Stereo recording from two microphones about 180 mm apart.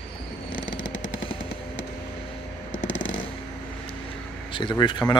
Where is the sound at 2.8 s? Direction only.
90° left.